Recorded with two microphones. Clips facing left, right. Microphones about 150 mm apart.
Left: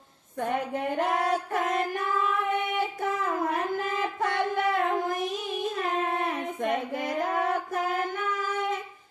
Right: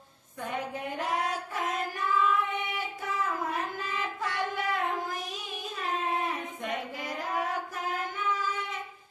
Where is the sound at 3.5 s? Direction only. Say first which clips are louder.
Left 5 dB; 55° left (ahead or behind).